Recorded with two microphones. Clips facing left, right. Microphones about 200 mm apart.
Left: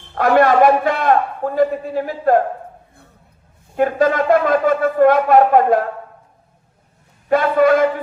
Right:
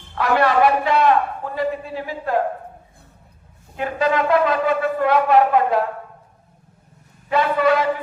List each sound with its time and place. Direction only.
0.1 s a man's voice: 45° left (ahead or behind)
3.8 s a man's voice: 45° left (ahead or behind)
7.3 s a man's voice: 45° left (ahead or behind)